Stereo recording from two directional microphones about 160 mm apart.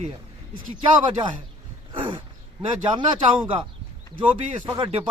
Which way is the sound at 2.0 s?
30° right (ahead or behind).